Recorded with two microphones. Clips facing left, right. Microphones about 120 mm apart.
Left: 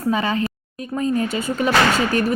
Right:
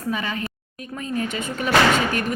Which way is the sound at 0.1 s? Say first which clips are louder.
Left 6 dB; 35° left (ahead or behind).